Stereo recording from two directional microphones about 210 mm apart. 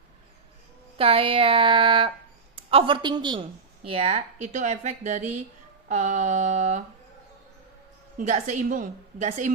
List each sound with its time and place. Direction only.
0.9 s a woman's voice: 25° right (ahead or behind)
8.2 s a woman's voice: 35° right (ahead or behind)